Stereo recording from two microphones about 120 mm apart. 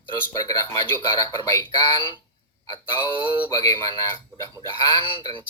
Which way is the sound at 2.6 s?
40° left (ahead or behind).